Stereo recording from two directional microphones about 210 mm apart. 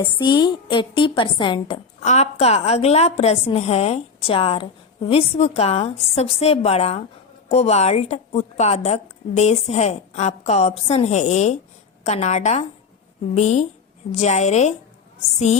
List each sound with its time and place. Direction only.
0.0 s a woman's voice: 20° left (ahead or behind)